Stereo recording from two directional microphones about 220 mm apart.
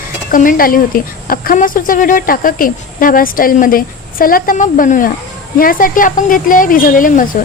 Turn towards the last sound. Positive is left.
turn(degrees=40)  # may be behind; listen again after turning